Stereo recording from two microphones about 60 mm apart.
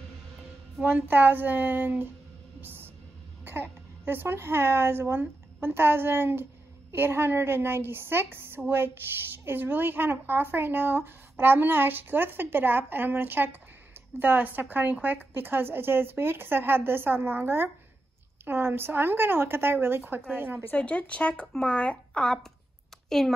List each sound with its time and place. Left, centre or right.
0.8 s speech: right
2.6 s a sound: right
4.0 s speech: right
20.7 s a woman's voice: centre